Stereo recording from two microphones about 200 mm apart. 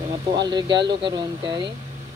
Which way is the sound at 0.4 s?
20° right (ahead or behind).